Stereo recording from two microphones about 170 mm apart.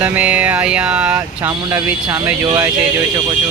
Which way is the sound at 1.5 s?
20° right (ahead or behind).